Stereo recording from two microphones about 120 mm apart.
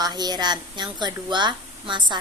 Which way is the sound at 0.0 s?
35° right (ahead or behind).